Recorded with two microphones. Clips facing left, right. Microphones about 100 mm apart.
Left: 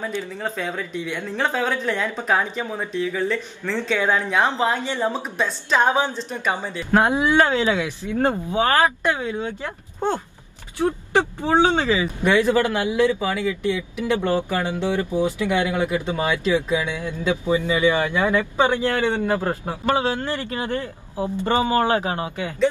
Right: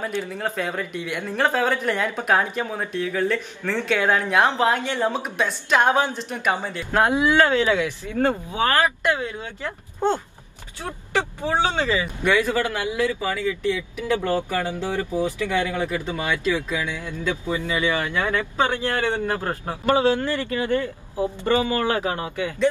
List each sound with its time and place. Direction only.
0.6 s speech: 15° right (ahead or behind)
2.9 s speech: 15° left (ahead or behind)
3.9 s speech: 5° right (ahead or behind)
6.9 s speech: 20° left (ahead or behind)
10.8 s speech: 20° left (ahead or behind)